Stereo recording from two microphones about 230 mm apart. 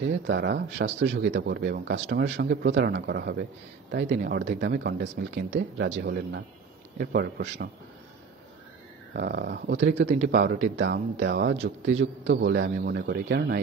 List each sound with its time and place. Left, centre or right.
0.0 s a man's voice: right
9.1 s speech: right
10.0 s a man's voice: right
10.8 s speech: right